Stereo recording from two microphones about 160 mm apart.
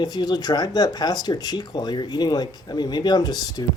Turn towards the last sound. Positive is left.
turn(degrees=25)  # may be behind; listen again after turning